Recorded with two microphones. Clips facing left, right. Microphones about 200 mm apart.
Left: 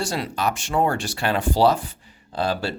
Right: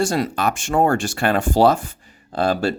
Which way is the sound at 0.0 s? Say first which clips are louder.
Right 5 dB; 50° right (ahead or behind).